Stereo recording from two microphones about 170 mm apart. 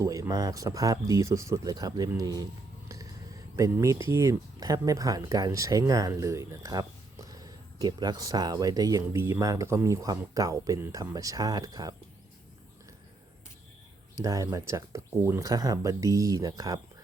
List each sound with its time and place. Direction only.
0.0 s speech: 20° right (ahead or behind)
2.9 s a sound: 20° right (ahead or behind)
4.1 s speech: 20° right (ahead or behind)
14.3 s speech: 20° right (ahead or behind)